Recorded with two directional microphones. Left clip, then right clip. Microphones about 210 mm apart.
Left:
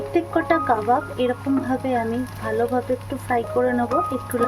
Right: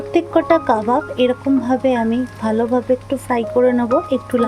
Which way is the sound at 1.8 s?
35° right (ahead or behind).